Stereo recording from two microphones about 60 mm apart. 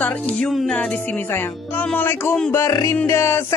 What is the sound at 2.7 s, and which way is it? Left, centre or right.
Music, left.